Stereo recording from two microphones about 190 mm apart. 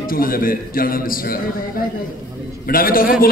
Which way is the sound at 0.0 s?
50° left (ahead or behind).